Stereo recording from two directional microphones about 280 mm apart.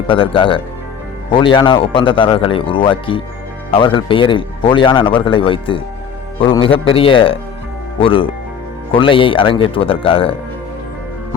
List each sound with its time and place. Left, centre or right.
0.1 s speech: centre